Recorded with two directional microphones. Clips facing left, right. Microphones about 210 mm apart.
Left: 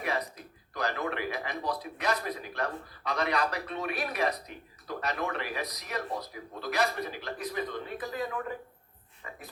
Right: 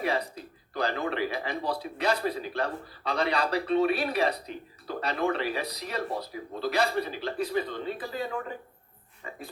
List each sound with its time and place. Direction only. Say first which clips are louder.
0.0 s speech: right 4 dB; 30° right (ahead or behind)